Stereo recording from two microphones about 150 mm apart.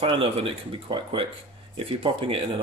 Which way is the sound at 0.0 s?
40° right (ahead or behind).